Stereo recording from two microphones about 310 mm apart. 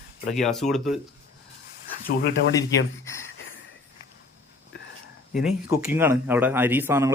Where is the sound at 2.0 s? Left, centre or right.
Left.